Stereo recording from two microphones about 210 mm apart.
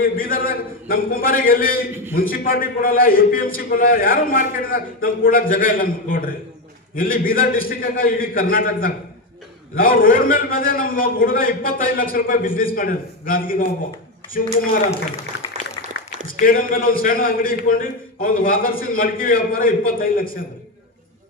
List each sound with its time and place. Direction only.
0.0 s a man's voice: 40° left (ahead or behind)
16.2 s a man's voice: 40° left (ahead or behind)